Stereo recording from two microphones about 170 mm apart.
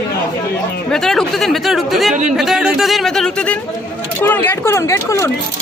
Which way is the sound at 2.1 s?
45° right (ahead or behind).